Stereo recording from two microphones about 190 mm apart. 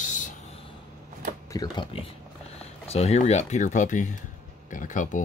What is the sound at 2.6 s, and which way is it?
Speech, 35° left (ahead or behind).